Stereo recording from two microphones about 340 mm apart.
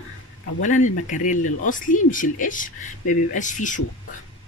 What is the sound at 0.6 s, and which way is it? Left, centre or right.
Speech, left.